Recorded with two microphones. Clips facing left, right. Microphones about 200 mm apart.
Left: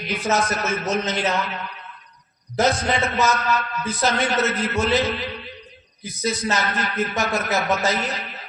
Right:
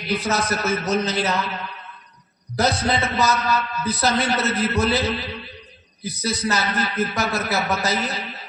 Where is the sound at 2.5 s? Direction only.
35° right (ahead or behind).